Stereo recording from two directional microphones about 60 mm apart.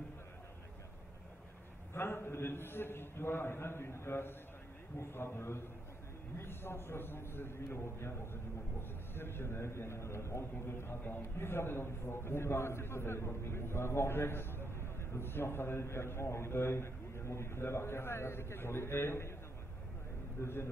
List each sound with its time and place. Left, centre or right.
2.0 s a man's voice: left
20.4 s a man's voice: left